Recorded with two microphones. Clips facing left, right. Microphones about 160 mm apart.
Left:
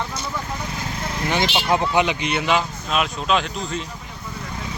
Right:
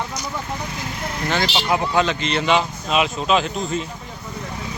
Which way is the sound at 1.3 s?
15° left (ahead or behind).